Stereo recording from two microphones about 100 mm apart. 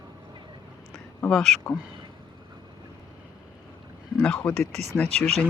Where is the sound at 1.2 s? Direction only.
5° left (ahead or behind).